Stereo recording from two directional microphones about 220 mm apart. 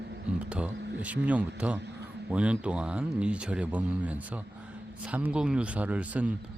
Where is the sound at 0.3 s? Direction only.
5° right (ahead or behind).